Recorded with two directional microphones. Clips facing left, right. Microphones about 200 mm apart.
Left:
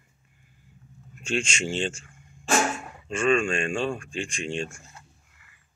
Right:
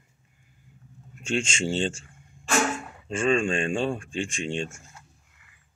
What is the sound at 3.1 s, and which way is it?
Speech, 25° right (ahead or behind).